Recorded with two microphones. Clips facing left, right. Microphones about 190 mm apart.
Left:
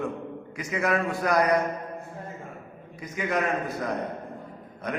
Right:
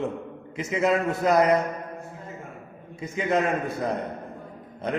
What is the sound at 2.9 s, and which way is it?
Speech, 25° right (ahead or behind).